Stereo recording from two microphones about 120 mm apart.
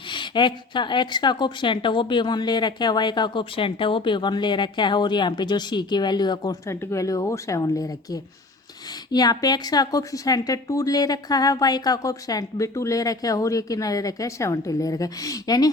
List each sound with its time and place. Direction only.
0.1 s a woman's voice: 40° left (ahead or behind)